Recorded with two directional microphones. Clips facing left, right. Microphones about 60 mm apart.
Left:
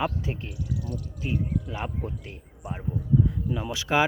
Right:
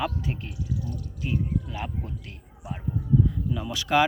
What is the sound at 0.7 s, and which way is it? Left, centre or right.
Speech, left.